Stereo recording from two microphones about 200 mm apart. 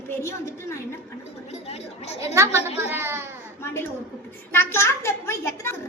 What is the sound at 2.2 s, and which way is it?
A child's voice, 15° right (ahead or behind).